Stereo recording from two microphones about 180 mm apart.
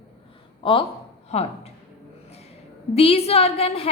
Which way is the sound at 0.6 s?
30° left (ahead or behind).